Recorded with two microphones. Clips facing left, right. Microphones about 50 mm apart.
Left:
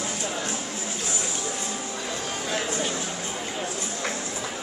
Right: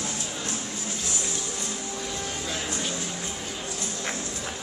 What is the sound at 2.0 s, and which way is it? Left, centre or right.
Music, left.